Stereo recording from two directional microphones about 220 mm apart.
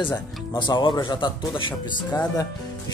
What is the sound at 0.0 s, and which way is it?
Speech, 20° left (ahead or behind).